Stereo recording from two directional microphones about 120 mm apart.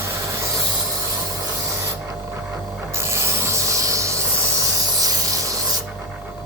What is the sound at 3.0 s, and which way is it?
Rub, 20° right (ahead or behind).